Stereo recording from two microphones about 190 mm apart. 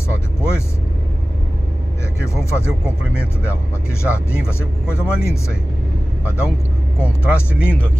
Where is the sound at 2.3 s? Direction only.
15° left (ahead or behind).